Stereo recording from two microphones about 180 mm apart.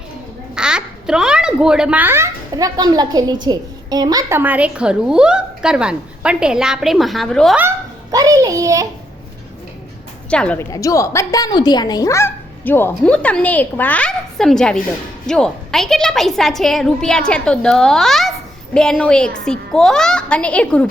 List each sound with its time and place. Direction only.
0.5 s a child's voice: 5° right (ahead or behind)
8.1 s a child's voice: 20° right (ahead or behind)
10.2 s speech: 5° left (ahead or behind)
10.7 s a child's voice: 15° left (ahead or behind)